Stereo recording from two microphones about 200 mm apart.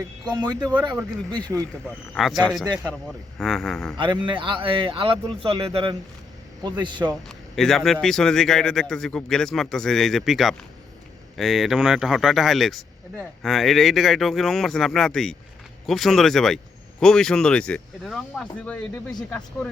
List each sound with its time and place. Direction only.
0.3 s speech: 20° right (ahead or behind)
2.1 s speech: centre (ahead or behind)
3.9 s speech: 25° right (ahead or behind)
7.3 s speech: centre (ahead or behind)